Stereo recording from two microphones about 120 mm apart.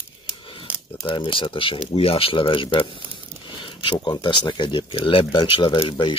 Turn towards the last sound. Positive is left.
turn(degrees=45)  # may be behind; listen again after turning